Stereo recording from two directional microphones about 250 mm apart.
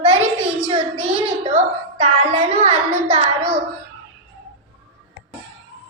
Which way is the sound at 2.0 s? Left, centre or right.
Right.